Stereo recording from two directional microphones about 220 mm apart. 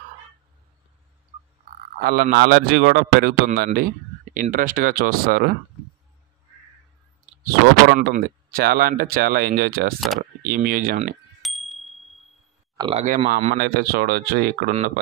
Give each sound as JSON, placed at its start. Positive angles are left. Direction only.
{"t": 2.0, "sound": "a man's voice", "side_deg": -40}
{"t": 7.9, "sound": "a man's voice", "side_deg": -45}
{"t": 9.9, "sound": "speech", "side_deg": 0}
{"t": 10.4, "sound": "speech", "side_deg": -40}
{"t": 11.4, "sound": "a sound", "side_deg": 0}
{"t": 12.7, "sound": "speech", "side_deg": -20}
{"t": 13.1, "sound": "speech", "side_deg": -35}